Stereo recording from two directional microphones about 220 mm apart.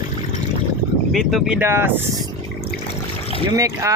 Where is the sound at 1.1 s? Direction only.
Centre (ahead or behind).